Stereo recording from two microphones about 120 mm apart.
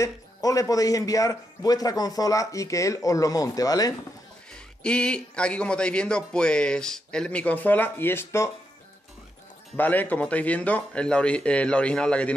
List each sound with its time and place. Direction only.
0.0 s a man's voice: 30° left (ahead or behind)
4.5 s speech: 10° left (ahead or behind)
9.8 s speech: 15° left (ahead or behind)